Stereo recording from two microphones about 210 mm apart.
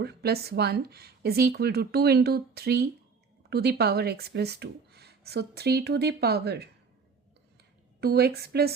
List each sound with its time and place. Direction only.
0.0 s speech: 50° right (ahead or behind)
8.0 s speech: 50° right (ahead or behind)